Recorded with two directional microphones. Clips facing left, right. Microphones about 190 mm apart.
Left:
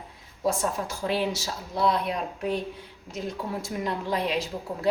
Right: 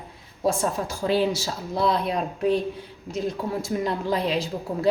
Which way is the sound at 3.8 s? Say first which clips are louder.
Right 2 dB; 35° right (ahead or behind).